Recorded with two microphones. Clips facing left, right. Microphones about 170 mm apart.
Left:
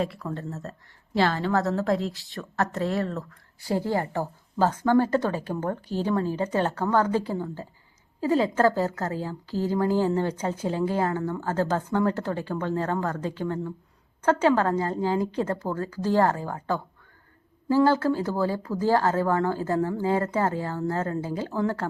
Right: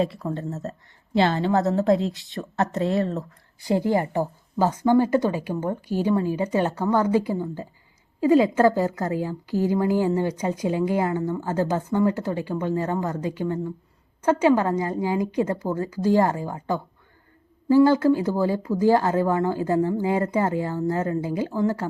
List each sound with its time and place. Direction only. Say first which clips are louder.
0.0 s a woman's voice: right 4 dB; 25° right (ahead or behind)